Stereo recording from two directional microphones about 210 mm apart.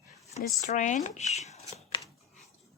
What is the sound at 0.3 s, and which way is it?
Speech, 35° left (ahead or behind).